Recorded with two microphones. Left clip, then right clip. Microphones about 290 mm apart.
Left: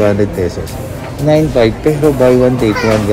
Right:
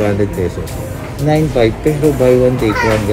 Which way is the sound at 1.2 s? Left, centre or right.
Centre.